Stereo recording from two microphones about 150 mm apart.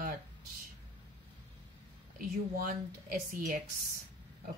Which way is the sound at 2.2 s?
70° right (ahead or behind).